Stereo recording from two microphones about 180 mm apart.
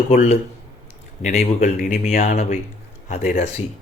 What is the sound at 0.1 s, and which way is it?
Speech, 40° left (ahead or behind).